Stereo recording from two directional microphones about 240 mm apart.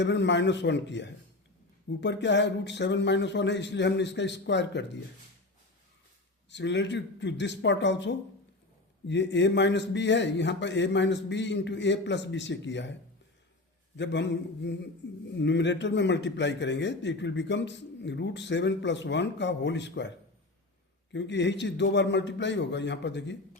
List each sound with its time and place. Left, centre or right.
0.0 s a man's voice: left
6.5 s a man's voice: left
21.1 s a man's voice: left